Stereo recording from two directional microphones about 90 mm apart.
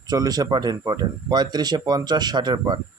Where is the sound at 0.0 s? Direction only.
45° right (ahead or behind).